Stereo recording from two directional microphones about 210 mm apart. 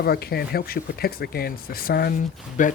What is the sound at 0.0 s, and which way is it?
Speech, 50° left (ahead or behind).